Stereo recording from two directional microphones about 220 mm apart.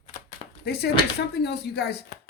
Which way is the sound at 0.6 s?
50° left (ahead or behind).